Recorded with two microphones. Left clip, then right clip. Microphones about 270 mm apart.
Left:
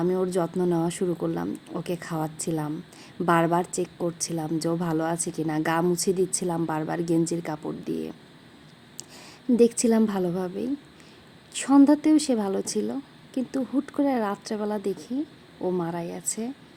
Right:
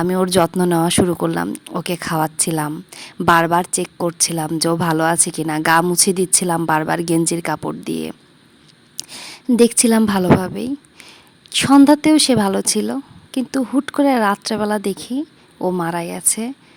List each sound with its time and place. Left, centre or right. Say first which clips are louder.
0.5 s a woman's voice: right 10 dB; right